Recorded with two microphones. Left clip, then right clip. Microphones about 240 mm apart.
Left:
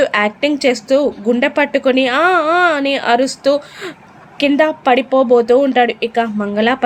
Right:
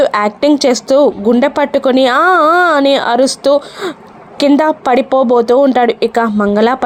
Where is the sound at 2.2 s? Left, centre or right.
Centre.